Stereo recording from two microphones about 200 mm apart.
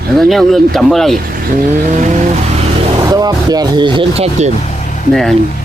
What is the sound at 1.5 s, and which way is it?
Vehicle, 40° right (ahead or behind).